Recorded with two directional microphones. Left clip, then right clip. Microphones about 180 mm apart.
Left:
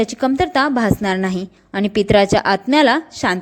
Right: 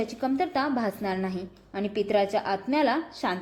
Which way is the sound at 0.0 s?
40° left (ahead or behind).